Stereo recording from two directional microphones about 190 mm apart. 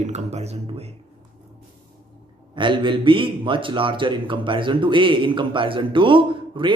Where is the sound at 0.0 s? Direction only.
35° right (ahead or behind).